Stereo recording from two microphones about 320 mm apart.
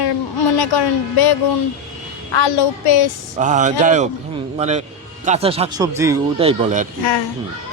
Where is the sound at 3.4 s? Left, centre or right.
Right.